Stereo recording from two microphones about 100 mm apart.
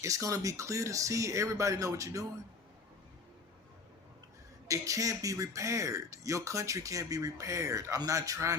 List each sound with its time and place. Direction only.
0.0 s speech: 30° right (ahead or behind)
4.7 s speech: 35° right (ahead or behind)